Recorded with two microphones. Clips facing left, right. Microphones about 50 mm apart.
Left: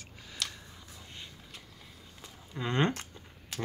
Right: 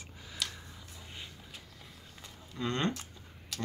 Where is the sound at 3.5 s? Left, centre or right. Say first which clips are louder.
Left 2 dB; left.